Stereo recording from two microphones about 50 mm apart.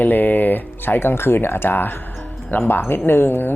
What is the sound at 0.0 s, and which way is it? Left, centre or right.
Speech, left.